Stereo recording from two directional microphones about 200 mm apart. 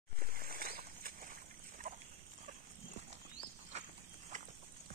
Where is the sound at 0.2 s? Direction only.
45° right (ahead or behind).